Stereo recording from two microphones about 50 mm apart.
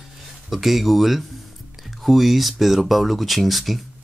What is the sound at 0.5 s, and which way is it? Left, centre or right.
Speech, centre.